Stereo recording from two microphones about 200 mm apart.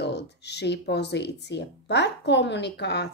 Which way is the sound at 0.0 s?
55° left (ahead or behind).